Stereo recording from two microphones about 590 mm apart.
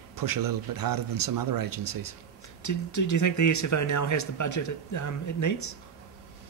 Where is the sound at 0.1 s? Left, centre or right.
Right.